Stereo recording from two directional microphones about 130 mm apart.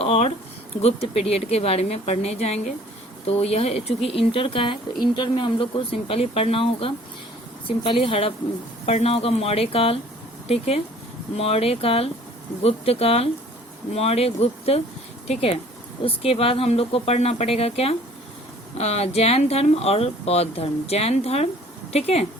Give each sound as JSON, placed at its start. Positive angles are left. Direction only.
{"t": 0.0, "sound": "a sound", "side_deg": 50}
{"t": 0.8, "sound": "speech", "side_deg": 50}
{"t": 11.3, "sound": "speech", "side_deg": 50}